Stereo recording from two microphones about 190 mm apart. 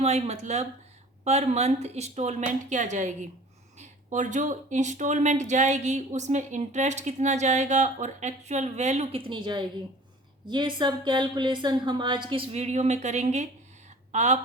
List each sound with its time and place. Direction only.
0.0 s speech: 35° right (ahead or behind)